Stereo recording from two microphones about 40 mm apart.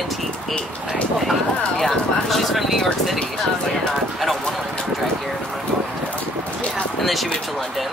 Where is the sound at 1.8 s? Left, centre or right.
Centre.